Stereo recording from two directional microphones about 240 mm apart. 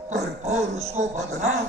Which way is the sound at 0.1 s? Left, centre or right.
Right.